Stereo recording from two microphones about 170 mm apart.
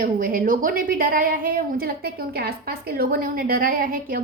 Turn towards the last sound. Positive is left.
turn(degrees=-60)  # may be behind; listen again after turning